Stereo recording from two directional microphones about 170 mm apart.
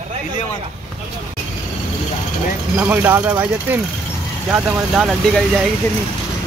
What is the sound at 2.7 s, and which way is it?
Speech, 10° right (ahead or behind).